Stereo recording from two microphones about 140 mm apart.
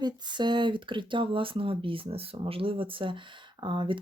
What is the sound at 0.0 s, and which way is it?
Speech, 30° right (ahead or behind).